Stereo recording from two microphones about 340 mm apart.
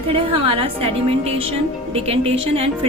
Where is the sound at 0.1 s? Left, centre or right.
Centre.